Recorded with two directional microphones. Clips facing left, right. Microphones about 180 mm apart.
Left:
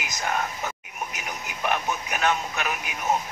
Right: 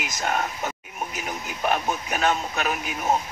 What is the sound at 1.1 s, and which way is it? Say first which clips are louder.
A man's voice: right 3 dB; 30° right (ahead or behind).